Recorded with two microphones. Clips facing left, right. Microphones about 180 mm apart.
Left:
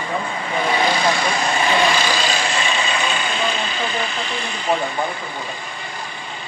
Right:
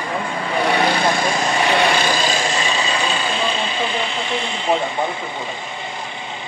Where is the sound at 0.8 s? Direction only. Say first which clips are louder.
Right 1 dB; 60° right (ahead or behind).